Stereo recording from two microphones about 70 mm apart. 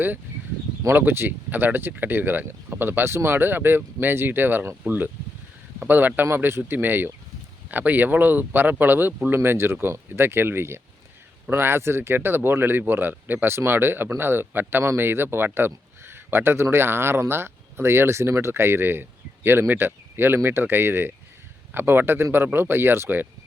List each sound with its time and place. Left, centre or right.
0.9 s speech: right